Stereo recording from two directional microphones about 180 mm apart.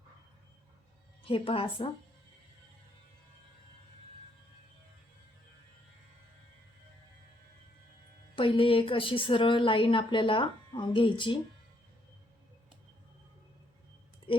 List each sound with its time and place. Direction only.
1.2 s a woman's voice: 30° left (ahead or behind)
8.4 s a woman's voice: 30° left (ahead or behind)